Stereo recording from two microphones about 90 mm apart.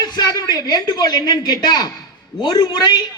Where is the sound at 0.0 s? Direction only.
50° left (ahead or behind).